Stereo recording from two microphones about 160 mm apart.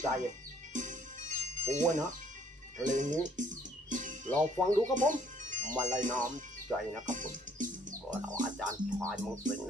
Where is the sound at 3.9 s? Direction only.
50° right (ahead or behind).